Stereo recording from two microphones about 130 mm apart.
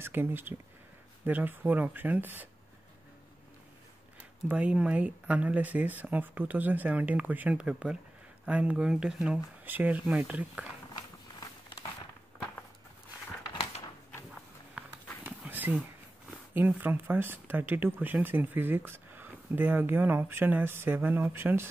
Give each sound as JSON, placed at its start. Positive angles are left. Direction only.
{"t": 0.0, "sound": "speech", "side_deg": -15}
{"t": 4.5, "sound": "speech", "side_deg": -10}
{"t": 15.2, "sound": "dog", "side_deg": -15}
{"t": 16.3, "sound": "speech", "side_deg": -15}